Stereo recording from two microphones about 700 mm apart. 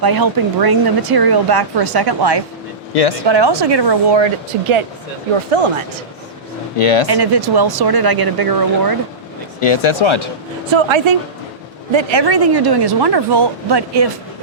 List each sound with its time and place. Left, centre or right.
0.0 s speech: right
2.9 s speech: left
3.2 s speech: right
6.7 s speech: left
7.1 s speech: right
9.6 s speech: left
10.7 s speech: right